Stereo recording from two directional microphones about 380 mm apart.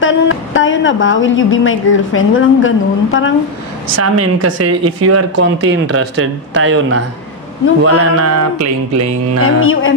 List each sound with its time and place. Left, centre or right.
0.0 s a woman's voice: left
3.9 s speech: right
9.4 s a woman's voice: left